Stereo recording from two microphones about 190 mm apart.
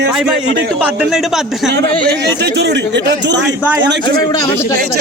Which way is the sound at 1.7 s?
60° right (ahead or behind).